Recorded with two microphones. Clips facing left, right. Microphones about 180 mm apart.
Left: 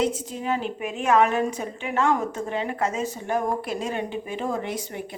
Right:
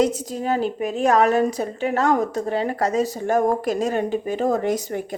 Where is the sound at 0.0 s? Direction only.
40° right (ahead or behind).